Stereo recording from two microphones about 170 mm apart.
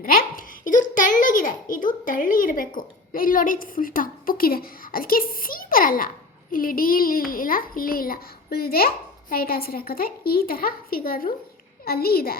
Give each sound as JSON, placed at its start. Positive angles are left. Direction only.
{"t": 0.0, "sound": "a child's voice", "side_deg": 55}